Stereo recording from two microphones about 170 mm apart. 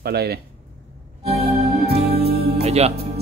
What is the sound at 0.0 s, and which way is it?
Music, 65° right (ahead or behind).